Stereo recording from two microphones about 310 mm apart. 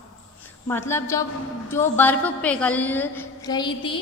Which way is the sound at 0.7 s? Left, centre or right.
Centre.